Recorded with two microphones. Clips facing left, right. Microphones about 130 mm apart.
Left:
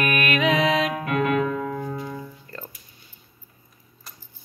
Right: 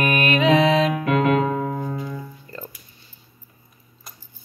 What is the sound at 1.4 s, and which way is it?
Music, 35° right (ahead or behind).